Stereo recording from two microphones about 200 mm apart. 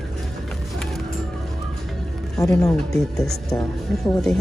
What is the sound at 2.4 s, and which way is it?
Speech, 15° left (ahead or behind).